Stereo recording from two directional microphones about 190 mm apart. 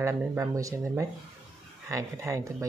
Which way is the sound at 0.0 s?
10° right (ahead or behind).